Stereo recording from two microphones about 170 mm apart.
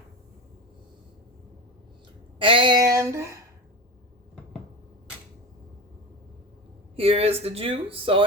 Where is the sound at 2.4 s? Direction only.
30° right (ahead or behind).